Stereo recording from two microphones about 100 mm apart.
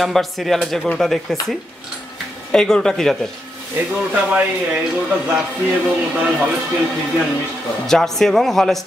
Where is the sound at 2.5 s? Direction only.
5° left (ahead or behind).